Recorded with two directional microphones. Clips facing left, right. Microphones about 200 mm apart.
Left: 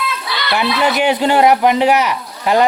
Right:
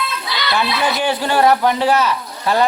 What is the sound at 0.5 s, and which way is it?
Speech, 20° left (ahead or behind).